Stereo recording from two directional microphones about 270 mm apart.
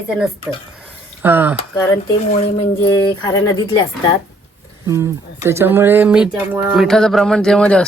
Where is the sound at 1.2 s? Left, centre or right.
Centre.